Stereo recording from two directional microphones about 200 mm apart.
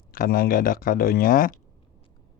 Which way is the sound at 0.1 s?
45° left (ahead or behind).